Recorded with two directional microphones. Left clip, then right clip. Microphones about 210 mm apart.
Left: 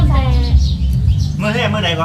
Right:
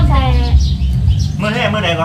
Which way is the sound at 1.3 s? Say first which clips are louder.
Right 1 dB; 15° left (ahead or behind).